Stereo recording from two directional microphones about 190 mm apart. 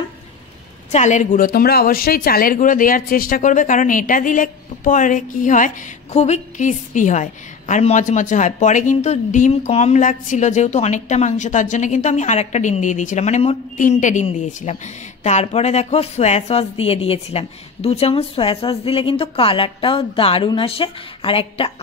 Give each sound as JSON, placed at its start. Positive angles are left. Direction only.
{"t": 0.9, "sound": "a woman's voice", "side_deg": 40}